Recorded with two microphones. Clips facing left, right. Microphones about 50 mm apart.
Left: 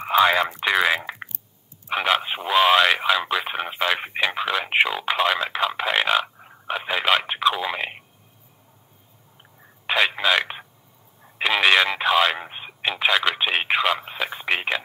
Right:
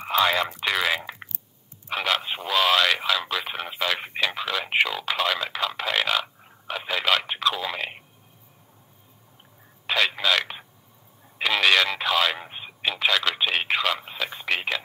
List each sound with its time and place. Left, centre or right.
0.1 s a man's voice: centre
9.8 s a sound: centre
11.2 s speech: centre